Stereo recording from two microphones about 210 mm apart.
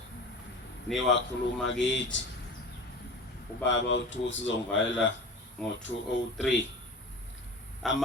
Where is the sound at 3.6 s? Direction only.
60° left (ahead or behind).